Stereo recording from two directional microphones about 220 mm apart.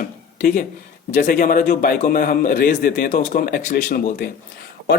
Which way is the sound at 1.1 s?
40° left (ahead or behind).